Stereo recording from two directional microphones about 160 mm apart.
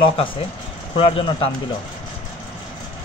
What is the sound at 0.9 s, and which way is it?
Speech, 35° left (ahead or behind).